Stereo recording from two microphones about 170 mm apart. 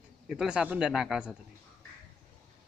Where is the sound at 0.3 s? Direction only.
5° right (ahead or behind).